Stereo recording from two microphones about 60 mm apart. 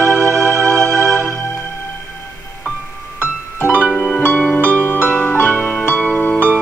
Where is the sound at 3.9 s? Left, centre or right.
Left.